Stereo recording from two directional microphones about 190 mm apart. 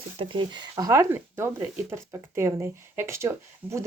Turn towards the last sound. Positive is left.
turn(degrees=-15)  # may be behind; listen again after turning